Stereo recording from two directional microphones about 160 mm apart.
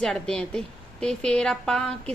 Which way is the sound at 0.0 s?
5° left (ahead or behind).